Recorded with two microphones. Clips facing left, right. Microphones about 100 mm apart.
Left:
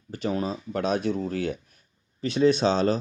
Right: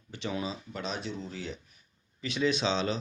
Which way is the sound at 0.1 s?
45° left (ahead or behind).